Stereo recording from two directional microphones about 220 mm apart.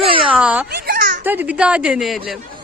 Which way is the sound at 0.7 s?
40° right (ahead or behind).